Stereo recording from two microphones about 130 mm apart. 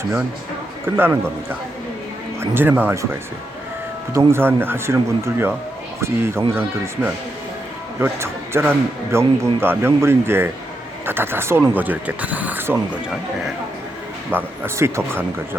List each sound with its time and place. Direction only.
0.9 s a man's voice: 15° right (ahead or behind)
14.3 s speech: 15° right (ahead or behind)